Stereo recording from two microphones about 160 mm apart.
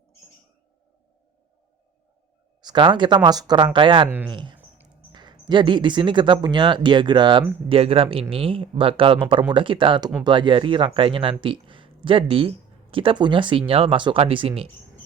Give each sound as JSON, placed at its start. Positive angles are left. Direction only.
{"t": 2.6, "sound": "speech", "side_deg": -30}